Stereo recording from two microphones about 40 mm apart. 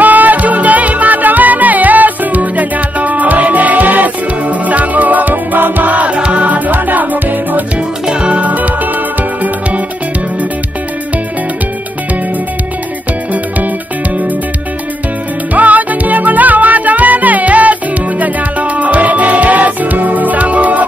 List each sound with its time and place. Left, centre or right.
0.0 s music: right
8.1 s music: right
8.4 s music: right
15.5 s music: right